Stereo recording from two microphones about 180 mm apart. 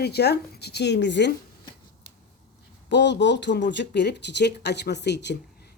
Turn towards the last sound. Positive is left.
turn(degrees=70)  # may be behind; listen again after turning